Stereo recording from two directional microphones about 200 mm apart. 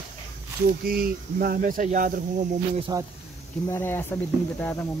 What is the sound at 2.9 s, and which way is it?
Speech, 20° right (ahead or behind).